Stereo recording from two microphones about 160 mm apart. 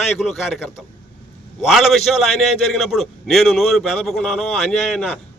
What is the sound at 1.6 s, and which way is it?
A man's voice, centre (ahead or behind).